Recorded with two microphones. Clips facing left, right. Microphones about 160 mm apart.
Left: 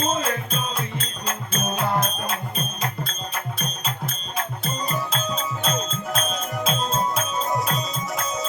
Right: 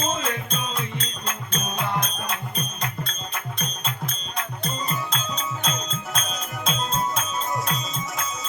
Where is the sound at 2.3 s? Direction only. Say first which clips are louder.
Left 2 dB; 45° left (ahead or behind).